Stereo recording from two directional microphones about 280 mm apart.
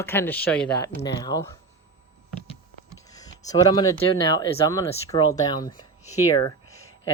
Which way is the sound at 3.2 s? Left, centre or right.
Centre.